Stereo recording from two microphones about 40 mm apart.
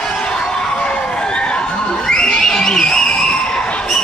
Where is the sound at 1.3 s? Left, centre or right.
Left.